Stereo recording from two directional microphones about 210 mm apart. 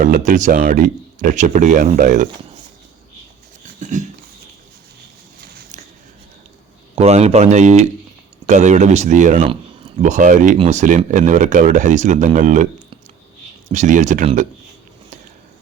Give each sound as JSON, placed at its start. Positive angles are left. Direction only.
{"t": 0.0, "sound": "speech", "side_deg": -40}
{"t": 3.8, "sound": "a sound", "side_deg": -35}
{"t": 6.9, "sound": "speech", "side_deg": -30}
{"t": 13.7, "sound": "speech", "side_deg": -35}